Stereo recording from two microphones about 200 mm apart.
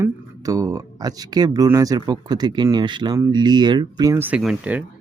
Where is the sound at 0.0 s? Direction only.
15° right (ahead or behind).